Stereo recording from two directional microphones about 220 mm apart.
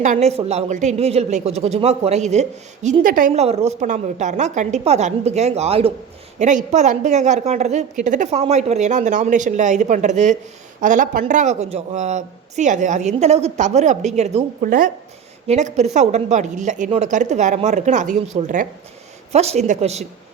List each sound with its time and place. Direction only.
0.0 s a woman's voice: 30° right (ahead or behind)